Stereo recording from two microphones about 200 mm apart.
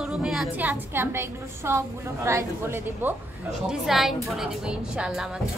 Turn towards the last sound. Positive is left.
turn(degrees=-5)  # may be behind; listen again after turning